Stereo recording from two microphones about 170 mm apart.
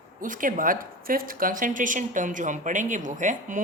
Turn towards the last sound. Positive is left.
turn(degrees=-50)  # may be behind; listen again after turning